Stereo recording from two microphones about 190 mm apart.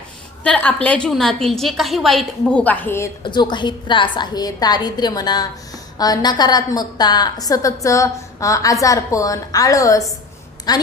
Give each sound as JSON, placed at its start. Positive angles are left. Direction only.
{"t": 0.4, "sound": "a woman's voice", "side_deg": 5}
{"t": 3.2, "sound": "a woman's voice", "side_deg": 25}